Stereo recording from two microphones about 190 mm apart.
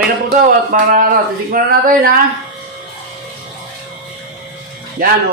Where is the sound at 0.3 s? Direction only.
45° right (ahead or behind).